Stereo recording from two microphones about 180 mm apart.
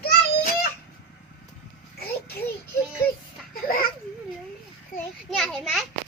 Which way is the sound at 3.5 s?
55° left (ahead or behind).